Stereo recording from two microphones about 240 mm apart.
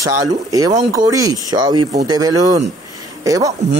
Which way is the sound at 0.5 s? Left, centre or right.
Centre.